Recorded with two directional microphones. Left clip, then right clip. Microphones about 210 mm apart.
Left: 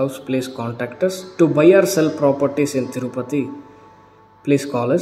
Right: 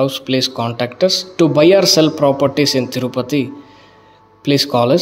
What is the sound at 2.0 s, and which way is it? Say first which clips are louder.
Speech: right 4 dB; 40° right (ahead or behind).